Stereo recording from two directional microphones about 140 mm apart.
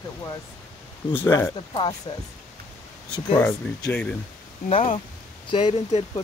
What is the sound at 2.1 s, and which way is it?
Speech, 30° left (ahead or behind).